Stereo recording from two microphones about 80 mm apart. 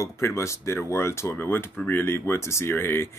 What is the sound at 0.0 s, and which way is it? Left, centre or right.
Speech, left.